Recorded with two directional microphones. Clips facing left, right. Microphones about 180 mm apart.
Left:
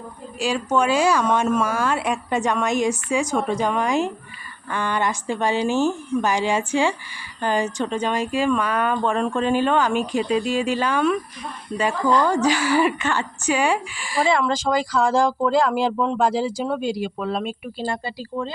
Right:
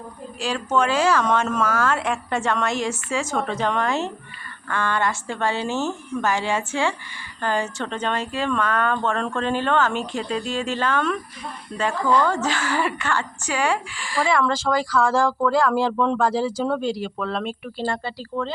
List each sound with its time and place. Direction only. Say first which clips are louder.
0.3 s a woman's voice: left 1 dB; 10° left (ahead or behind)